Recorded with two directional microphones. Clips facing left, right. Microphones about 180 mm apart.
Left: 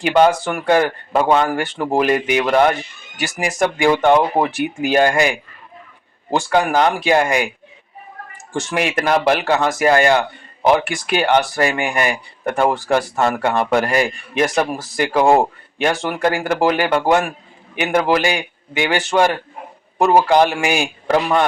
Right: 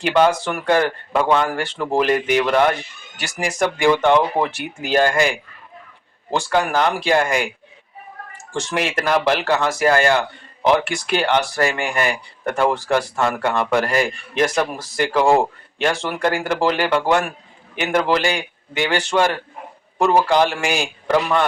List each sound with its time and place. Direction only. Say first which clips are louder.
0.0 s a man's voice: left 2 dB; 15° left (ahead or behind)
6.3 s a man's voice: left 3 dB; 15° left (ahead or behind)
8.5 s a man's voice: left 2 dB; 15° left (ahead or behind)